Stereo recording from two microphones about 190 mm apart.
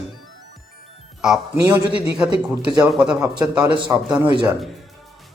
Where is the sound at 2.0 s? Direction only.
5° right (ahead or behind).